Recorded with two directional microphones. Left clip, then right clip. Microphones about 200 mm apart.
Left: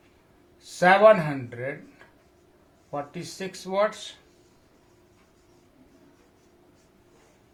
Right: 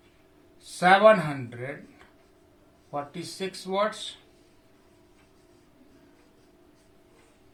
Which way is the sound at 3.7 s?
40° left (ahead or behind).